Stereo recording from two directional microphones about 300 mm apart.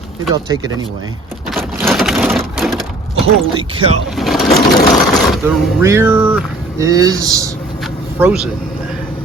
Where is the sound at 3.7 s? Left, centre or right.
Centre.